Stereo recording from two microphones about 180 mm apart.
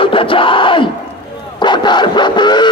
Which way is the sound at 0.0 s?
30° left (ahead or behind).